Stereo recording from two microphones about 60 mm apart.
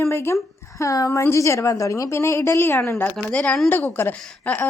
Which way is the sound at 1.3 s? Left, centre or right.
Left.